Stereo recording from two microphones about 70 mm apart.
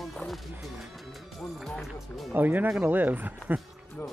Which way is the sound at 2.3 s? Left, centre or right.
Right.